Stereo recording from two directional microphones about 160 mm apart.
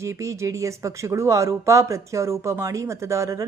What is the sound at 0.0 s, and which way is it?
Speech, 20° right (ahead or behind).